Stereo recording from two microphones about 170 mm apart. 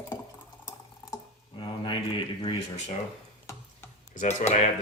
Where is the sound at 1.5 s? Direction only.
30° left (ahead or behind).